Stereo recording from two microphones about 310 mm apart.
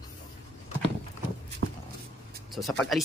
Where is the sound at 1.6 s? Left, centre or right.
Right.